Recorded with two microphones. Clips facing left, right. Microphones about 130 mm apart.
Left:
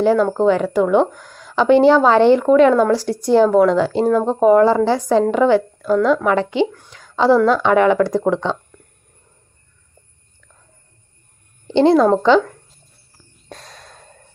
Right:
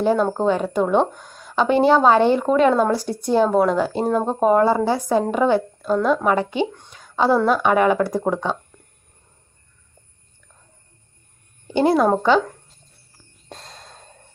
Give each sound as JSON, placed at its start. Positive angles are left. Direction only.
{"t": 0.0, "sound": "a woman's voice", "side_deg": -20}
{"t": 11.9, "sound": "a woman's voice", "side_deg": -15}
{"t": 13.7, "sound": "a sound", "side_deg": -25}